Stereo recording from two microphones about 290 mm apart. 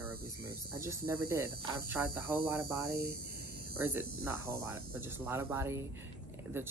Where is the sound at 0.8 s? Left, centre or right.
Centre.